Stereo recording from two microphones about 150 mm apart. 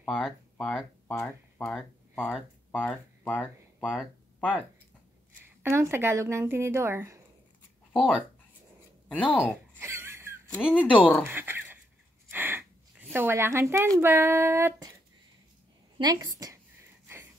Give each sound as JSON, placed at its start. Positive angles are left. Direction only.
{"t": 0.0, "sound": "speech", "side_deg": 5}
{"t": 5.6, "sound": "speech", "side_deg": -15}
{"t": 7.9, "sound": "speech", "side_deg": 0}
{"t": 9.3, "sound": "speech", "side_deg": 10}
{"t": 9.8, "sound": "a sound", "side_deg": -20}
{"t": 10.6, "sound": "speech", "side_deg": 5}
{"t": 11.2, "sound": "speech", "side_deg": -15}
{"t": 12.3, "sound": "a sound", "side_deg": -15}
{"t": 13.1, "sound": "speech", "side_deg": -15}
{"t": 16.0, "sound": "a woman's voice", "side_deg": -25}